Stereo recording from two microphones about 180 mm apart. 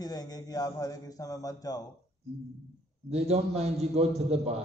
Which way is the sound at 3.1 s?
35° right (ahead or behind).